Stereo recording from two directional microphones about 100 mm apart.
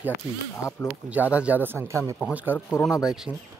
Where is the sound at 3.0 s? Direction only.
5° right (ahead or behind).